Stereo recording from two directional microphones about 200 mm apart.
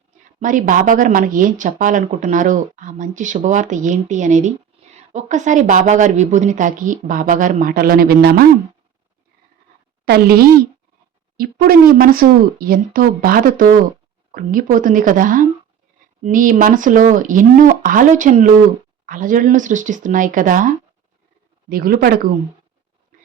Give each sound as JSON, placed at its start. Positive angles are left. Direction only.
{"t": 0.3, "sound": "speech", "side_deg": -40}
{"t": 10.1, "sound": "speech", "side_deg": -50}